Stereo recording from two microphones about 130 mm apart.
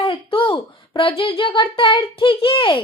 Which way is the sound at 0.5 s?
40° left (ahead or behind).